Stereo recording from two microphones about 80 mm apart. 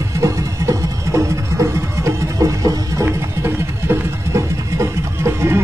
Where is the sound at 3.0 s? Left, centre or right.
Right.